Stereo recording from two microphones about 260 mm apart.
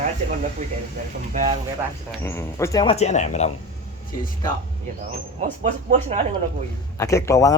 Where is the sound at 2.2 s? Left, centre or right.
Centre; by 3.5 s left.